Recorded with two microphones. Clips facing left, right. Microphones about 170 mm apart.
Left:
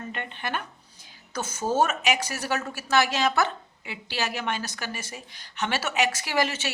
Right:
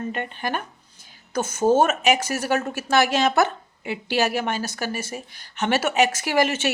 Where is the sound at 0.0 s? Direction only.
40° right (ahead or behind).